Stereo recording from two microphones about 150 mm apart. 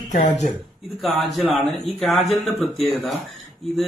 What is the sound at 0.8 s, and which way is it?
A man's voice, centre (ahead or behind).